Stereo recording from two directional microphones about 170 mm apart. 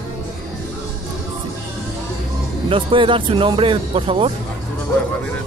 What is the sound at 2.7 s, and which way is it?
Speech, 30° right (ahead or behind).